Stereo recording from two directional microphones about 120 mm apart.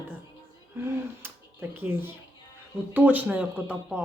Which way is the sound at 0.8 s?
20° right (ahead or behind).